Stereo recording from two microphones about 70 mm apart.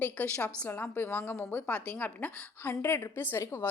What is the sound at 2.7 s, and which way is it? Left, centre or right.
Speech, left.